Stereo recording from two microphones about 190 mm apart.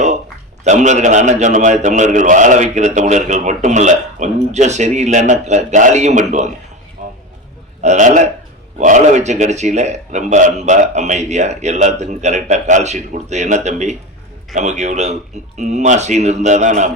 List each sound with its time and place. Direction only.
0.6 s a man's voice: 40° right (ahead or behind)
7.8 s a man's voice: 40° right (ahead or behind)